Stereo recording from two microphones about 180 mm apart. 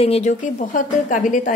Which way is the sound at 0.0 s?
35° left (ahead or behind).